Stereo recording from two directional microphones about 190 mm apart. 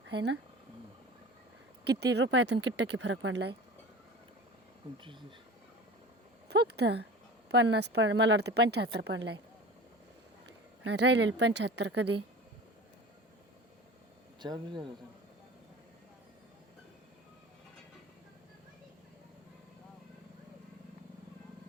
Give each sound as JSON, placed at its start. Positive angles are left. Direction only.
{"t": 0.1, "sound": "speech", "side_deg": -60}
{"t": 1.8, "sound": "a woman's voice", "side_deg": -60}
{"t": 6.5, "sound": "a woman's voice", "side_deg": -60}
{"t": 10.4, "sound": "speech", "side_deg": -65}
{"t": 14.4, "sound": "speech", "side_deg": -25}